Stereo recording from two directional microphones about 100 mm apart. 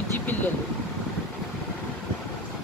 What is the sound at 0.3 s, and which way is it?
Vehicle, 20° left (ahead or behind).